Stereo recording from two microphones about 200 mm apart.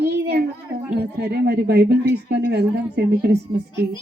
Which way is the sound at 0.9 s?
55° right (ahead or behind).